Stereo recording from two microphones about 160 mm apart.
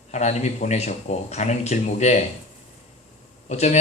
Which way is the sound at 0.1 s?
45° left (ahead or behind).